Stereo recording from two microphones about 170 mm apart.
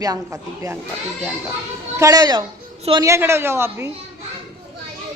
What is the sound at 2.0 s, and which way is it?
A woman's voice, 20° right (ahead or behind).